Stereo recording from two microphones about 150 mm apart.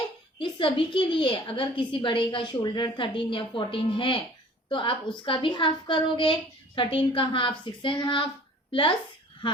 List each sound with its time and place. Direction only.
0.3 s a woman's voice: 35° left (ahead or behind)